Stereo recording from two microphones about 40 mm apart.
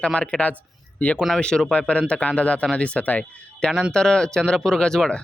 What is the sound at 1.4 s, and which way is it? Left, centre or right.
A man's voice, left.